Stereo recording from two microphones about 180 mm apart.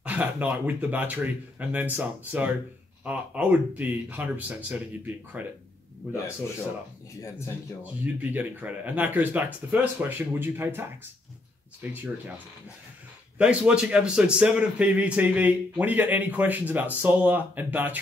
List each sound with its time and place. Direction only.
0.0 s a man's voice: 10° right (ahead or behind)
7.2 s speech: 15° left (ahead or behind)
7.8 s a man's voice: 10° right (ahead or behind)
13.4 s a man's voice: 5° right (ahead or behind)